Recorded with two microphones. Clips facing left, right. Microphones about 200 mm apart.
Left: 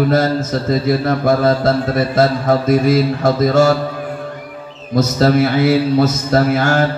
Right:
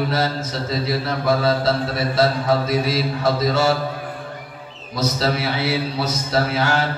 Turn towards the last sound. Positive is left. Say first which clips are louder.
# left 6 dB
turn(degrees=50)  # may be behind; listen again after turning